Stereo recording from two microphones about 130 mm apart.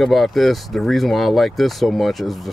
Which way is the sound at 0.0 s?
Centre (ahead or behind).